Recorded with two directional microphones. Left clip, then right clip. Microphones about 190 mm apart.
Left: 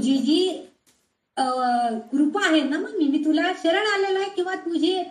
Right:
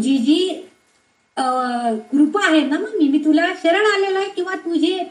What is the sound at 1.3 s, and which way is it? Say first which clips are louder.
Speech: right 2 dB; 20° right (ahead or behind).